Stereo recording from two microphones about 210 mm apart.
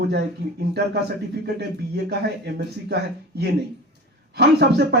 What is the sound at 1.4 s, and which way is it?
Speech, 50° right (ahead or behind).